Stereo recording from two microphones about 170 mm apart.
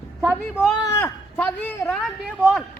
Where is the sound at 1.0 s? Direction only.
10° left (ahead or behind).